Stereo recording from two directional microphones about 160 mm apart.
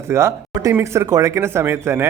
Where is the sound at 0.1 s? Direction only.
15° right (ahead or behind).